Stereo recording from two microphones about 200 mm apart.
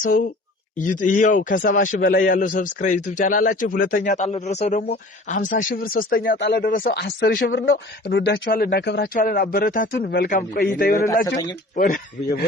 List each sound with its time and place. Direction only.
0.8 s a man's voice: 40° left (ahead or behind)